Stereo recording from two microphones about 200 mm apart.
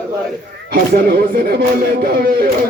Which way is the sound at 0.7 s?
50° right (ahead or behind).